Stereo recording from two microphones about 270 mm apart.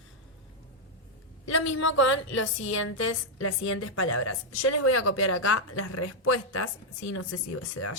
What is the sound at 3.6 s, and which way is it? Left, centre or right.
Speech, left.